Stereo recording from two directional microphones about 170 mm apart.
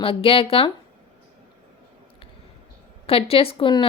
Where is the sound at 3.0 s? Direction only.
35° left (ahead or behind).